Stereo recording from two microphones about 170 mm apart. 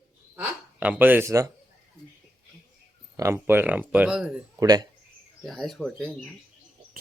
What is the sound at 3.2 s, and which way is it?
Speech, 15° right (ahead or behind).